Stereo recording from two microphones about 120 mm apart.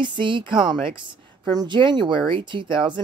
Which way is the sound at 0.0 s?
40° right (ahead or behind).